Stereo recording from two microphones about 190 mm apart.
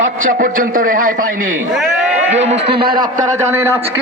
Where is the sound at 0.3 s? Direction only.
45° right (ahead or behind).